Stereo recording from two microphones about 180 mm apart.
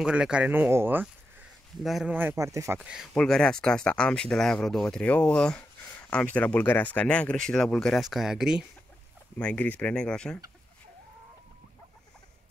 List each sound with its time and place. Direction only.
0.0 s speech: 5° right (ahead or behind)
2.8 s speech: 5° right (ahead or behind)
9.4 s speech: 10° left (ahead or behind)